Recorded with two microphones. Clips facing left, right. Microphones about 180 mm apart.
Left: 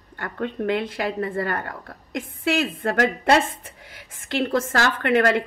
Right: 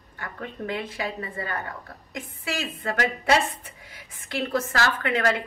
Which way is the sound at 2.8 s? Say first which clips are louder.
Left 5 dB; 55° left (ahead or behind).